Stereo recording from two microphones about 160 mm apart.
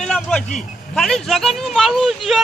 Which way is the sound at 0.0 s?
5° left (ahead or behind).